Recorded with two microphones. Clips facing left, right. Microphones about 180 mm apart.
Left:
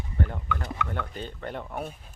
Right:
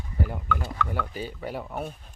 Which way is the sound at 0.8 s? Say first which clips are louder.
Right 2 dB; 5° right (ahead or behind).